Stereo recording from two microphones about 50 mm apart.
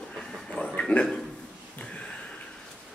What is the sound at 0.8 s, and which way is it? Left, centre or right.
Speech, left.